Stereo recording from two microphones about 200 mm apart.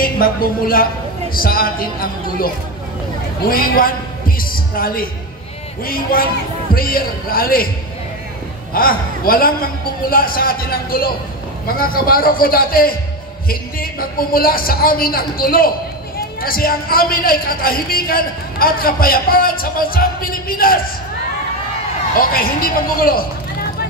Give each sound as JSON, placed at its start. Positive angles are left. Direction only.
{"t": 0.0, "sound": "speech", "side_deg": 45}
{"t": 8.7, "sound": "speech", "side_deg": 45}
{"t": 22.1, "sound": "speech", "side_deg": 45}